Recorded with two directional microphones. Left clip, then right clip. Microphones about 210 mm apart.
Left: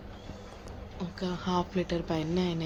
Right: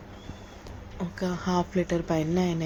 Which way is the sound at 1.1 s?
25° right (ahead or behind).